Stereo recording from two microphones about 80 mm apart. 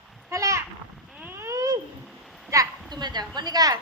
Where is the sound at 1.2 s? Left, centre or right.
Right.